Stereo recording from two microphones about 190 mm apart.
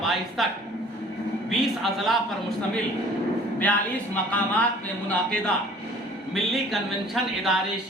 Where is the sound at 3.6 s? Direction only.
10° left (ahead or behind).